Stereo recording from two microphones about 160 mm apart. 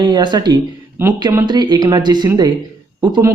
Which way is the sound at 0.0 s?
30° right (ahead or behind).